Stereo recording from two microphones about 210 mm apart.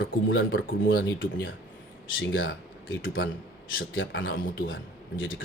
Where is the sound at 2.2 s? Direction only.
70° left (ahead or behind).